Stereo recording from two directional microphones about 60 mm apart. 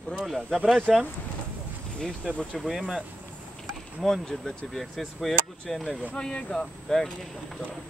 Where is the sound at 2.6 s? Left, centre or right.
Centre.